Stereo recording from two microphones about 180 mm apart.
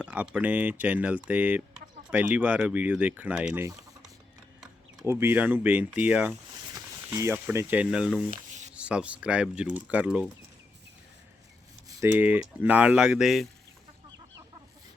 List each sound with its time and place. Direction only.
0.0 s speech: 5° right (ahead or behind)
5.0 s speech: 15° right (ahead or behind)
8.3 s a sound: 45° right (ahead or behind)
8.7 s speech: 5° right (ahead or behind)
11.9 s speech: 15° right (ahead or behind)